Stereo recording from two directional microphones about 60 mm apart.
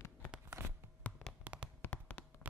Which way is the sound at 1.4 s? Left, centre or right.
Right.